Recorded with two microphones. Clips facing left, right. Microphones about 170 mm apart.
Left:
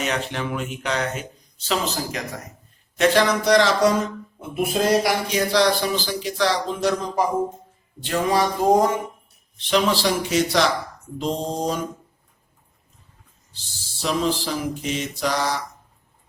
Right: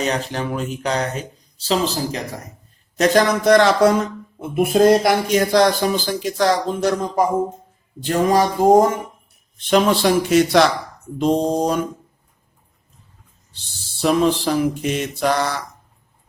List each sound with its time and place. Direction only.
0.0 s speech: 35° right (ahead or behind)
8.0 s speech: 45° right (ahead or behind)
11.2 s mantra: 60° right (ahead or behind)
14.0 s mantra: 55° right (ahead or behind)